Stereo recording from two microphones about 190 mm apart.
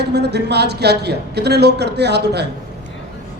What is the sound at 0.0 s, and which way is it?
A man's voice, 60° right (ahead or behind).